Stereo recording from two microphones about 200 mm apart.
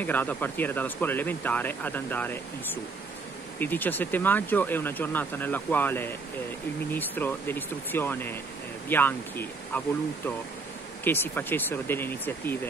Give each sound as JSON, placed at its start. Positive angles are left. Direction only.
{"t": 0.0, "sound": "speech", "side_deg": 10}